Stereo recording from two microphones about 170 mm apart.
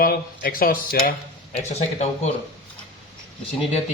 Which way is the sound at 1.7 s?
40° left (ahead or behind).